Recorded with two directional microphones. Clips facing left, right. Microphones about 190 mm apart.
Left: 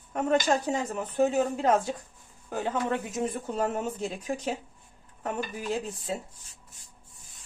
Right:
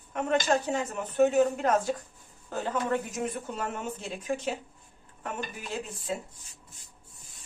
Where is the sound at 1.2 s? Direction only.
30° left (ahead or behind).